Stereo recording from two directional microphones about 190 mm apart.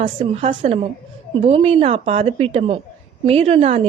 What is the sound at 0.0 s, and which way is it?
Speech, 45° right (ahead or behind).